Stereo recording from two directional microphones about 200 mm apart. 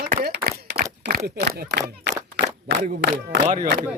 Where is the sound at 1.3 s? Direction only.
55° right (ahead or behind).